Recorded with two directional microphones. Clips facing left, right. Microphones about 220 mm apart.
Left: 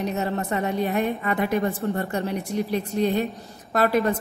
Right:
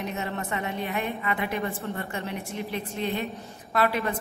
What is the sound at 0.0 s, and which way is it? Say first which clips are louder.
A woman's voice: left 6 dB; 40° left (ahead or behind).